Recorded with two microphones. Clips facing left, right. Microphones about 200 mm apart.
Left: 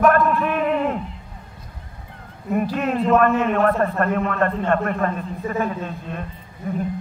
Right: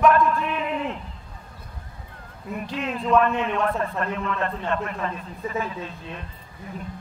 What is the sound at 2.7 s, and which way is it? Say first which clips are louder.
A man's voice: left 1 dB; 50° left (ahead or behind).